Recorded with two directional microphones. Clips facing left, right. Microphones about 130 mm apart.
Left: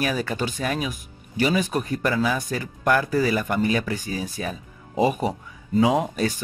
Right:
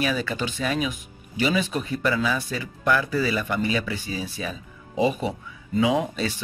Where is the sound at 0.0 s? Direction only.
45° left (ahead or behind).